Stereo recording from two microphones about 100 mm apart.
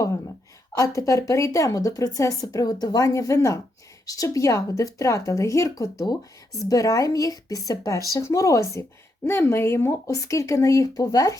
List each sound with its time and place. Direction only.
0.8 s a woman's voice: 30° left (ahead or behind)